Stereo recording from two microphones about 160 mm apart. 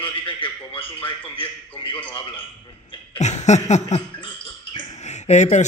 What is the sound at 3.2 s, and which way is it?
A man's voice, 45° left (ahead or behind).